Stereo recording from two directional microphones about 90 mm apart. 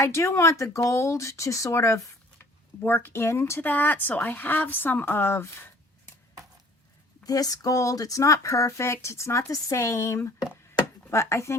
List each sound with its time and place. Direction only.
0.0 s speech: 30° left (ahead or behind)
3.7 s speech: 20° left (ahead or behind)
7.3 s speech: 45° left (ahead or behind)